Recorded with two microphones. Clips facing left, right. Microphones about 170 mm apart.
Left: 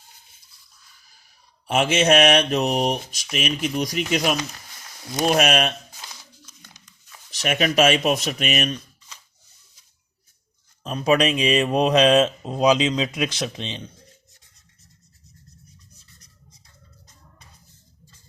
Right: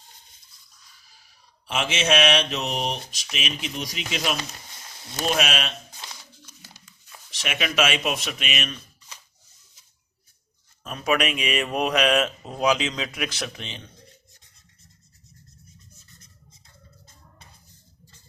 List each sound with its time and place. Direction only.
1.6 s speech: 50° left (ahead or behind)
7.3 s speech: 45° left (ahead or behind)
10.8 s mantra: 30° left (ahead or behind)